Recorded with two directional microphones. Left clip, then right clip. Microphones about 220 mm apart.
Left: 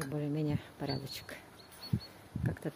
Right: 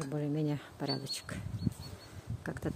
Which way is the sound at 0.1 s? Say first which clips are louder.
Right 2 dB; 5° right (ahead or behind).